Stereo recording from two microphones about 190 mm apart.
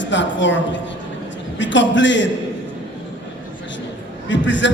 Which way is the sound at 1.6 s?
70° left (ahead or behind).